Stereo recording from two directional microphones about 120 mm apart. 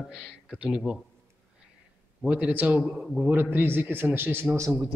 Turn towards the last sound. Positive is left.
turn(degrees=-20)  # may be behind; listen again after turning